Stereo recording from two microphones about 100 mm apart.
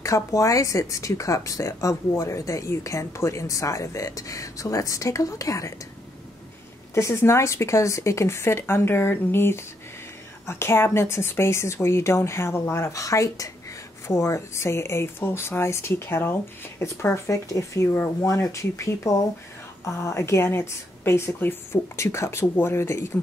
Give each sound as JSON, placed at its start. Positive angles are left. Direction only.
{"t": 0.0, "sound": "speech", "side_deg": 35}
{"t": 6.9, "sound": "a woman's voice", "side_deg": 30}